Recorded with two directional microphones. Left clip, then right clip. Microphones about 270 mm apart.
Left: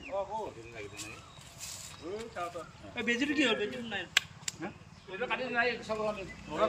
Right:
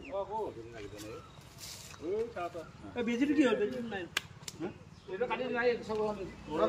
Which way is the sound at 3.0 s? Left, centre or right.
Right.